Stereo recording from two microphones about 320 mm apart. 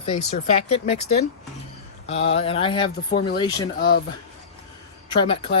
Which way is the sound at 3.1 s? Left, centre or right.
Left.